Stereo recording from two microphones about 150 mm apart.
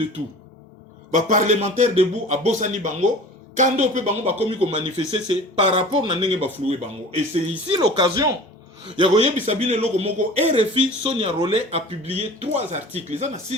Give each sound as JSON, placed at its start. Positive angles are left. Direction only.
{"t": 1.1, "sound": "speech", "side_deg": -50}
{"t": 9.0, "sound": "speech", "side_deg": -40}